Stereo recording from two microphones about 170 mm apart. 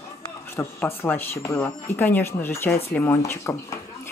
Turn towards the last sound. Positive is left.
turn(degrees=15)  # may be behind; listen again after turning